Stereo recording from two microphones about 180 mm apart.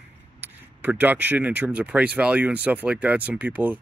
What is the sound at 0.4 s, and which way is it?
Speech, 10° right (ahead or behind).